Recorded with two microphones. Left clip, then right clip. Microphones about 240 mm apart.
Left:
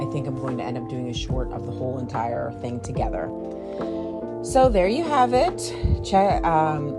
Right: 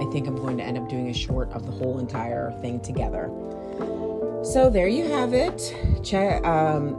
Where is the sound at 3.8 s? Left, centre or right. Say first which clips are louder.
Even; centre.